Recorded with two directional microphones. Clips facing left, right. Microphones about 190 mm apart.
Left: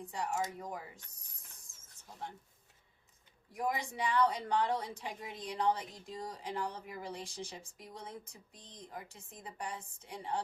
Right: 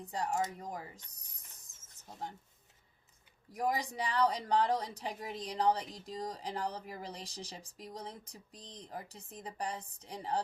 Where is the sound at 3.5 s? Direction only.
40° right (ahead or behind).